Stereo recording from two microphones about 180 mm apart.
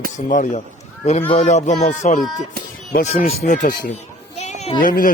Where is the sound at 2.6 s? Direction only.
60° right (ahead or behind).